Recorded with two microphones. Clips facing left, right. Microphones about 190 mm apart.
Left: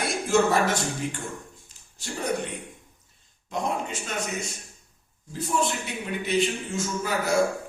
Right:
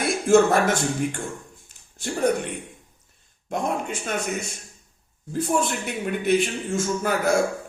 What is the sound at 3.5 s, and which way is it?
Speech, 55° right (ahead or behind).